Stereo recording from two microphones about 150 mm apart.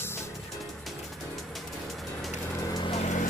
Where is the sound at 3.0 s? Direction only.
55° left (ahead or behind).